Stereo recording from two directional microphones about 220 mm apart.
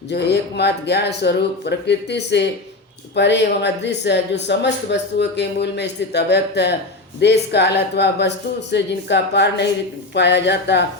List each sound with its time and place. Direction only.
0.1 s speech: 50° left (ahead or behind)